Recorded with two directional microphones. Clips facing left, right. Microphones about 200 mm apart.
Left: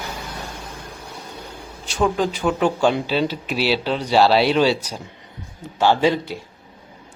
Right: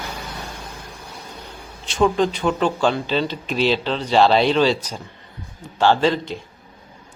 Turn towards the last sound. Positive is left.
turn(degrees=10)  # may be behind; listen again after turning